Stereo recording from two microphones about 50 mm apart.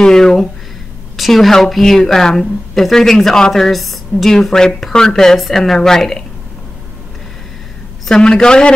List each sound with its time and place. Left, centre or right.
0.0 s a woman's voice: centre
8.1 s a woman's voice: centre